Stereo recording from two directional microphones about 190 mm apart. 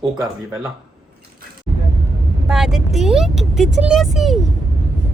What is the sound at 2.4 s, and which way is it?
Speech, centre (ahead or behind).